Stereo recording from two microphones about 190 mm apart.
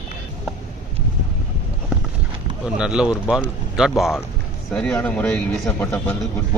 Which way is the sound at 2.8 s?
5° right (ahead or behind).